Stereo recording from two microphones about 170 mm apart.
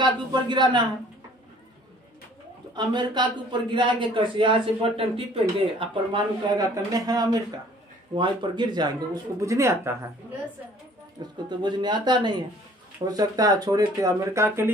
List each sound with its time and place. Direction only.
0.0 s a man's voice: 25° right (ahead or behind)
2.7 s a man's voice: 25° right (ahead or behind)
11.4 s a man's voice: 25° right (ahead or behind)